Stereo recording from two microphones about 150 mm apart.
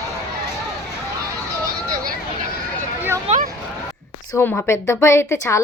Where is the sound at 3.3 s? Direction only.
45° right (ahead or behind).